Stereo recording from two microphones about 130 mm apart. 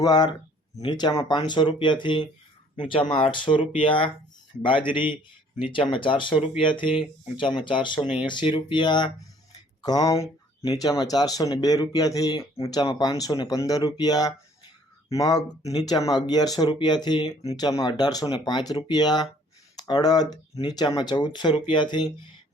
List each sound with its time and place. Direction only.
0.0 s speech: 30° left (ahead or behind)